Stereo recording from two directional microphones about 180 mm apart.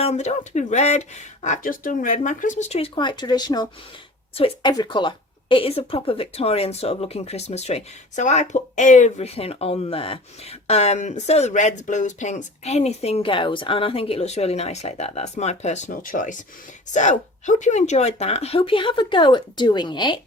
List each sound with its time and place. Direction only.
0.0 s a woman's voice: 35° left (ahead or behind)